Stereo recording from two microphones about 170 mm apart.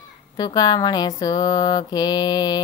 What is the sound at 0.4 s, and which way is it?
Mantra, 25° left (ahead or behind).